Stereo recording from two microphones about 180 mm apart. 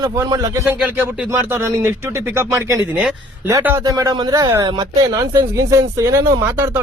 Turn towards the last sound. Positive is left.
turn(degrees=-15)  # may be behind; listen again after turning